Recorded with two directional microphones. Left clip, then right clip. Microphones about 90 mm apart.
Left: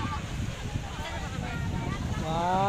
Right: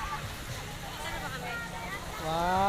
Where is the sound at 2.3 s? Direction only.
45° left (ahead or behind).